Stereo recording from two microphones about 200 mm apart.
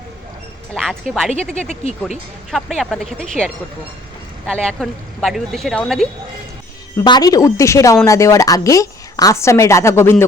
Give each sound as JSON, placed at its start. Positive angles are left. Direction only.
{"t": 0.7, "sound": "speech", "side_deg": 0}
{"t": 1.8, "sound": "speech", "side_deg": 35}
{"t": 2.5, "sound": "speech", "side_deg": 0}
{"t": 6.9, "sound": "a woman's voice", "side_deg": 20}